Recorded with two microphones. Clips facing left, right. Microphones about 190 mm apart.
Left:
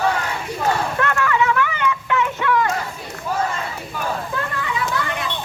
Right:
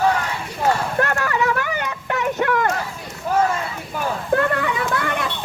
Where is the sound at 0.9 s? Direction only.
40° right (ahead or behind).